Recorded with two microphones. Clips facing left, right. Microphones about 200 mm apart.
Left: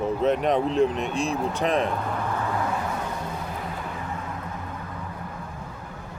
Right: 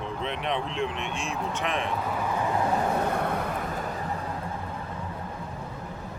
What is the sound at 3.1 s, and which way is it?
Vehicle, 60° right (ahead or behind).